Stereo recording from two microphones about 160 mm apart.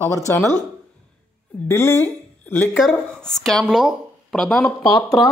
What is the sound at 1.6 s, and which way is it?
Speech, 15° left (ahead or behind).